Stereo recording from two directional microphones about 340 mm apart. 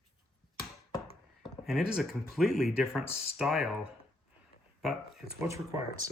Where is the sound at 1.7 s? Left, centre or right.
Centre.